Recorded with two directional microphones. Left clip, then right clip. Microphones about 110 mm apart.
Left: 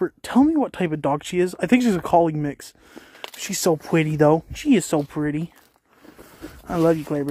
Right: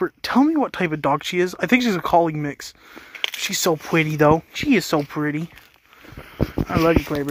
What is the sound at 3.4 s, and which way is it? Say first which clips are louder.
Speech: right 1 dB; 60° left (ahead or behind).